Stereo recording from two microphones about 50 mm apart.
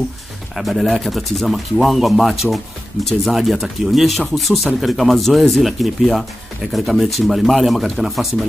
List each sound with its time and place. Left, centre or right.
0.6 s speech: centre